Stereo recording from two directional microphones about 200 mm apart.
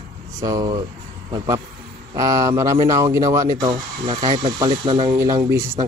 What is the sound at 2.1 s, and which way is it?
Speech, 15° right (ahead or behind).